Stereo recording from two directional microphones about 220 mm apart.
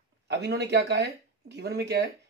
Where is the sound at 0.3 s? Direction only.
50° right (ahead or behind).